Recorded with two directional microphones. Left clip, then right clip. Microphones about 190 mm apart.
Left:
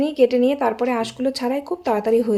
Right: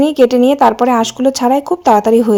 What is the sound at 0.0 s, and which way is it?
Speech, 35° right (ahead or behind).